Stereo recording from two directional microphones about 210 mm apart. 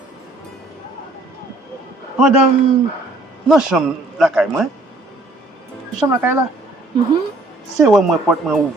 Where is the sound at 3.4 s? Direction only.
Centre (ahead or behind).